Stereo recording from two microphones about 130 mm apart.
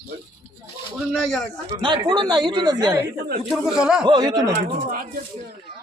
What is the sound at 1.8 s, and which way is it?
Speech, 35° right (ahead or behind).